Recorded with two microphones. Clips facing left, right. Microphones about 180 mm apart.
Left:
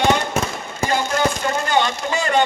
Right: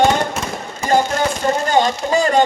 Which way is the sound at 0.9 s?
40° right (ahead or behind).